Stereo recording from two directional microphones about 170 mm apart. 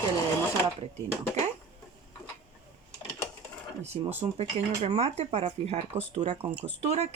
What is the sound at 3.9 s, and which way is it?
Speech, 35° right (ahead or behind).